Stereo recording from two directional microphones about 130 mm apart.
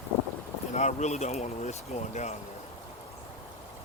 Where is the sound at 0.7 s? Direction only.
60° left (ahead or behind).